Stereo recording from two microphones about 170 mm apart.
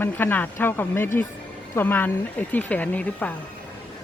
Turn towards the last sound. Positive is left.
turn(degrees=10)  # may be behind; listen again after turning